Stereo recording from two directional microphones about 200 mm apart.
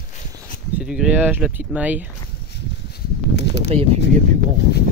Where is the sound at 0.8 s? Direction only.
5° right (ahead or behind).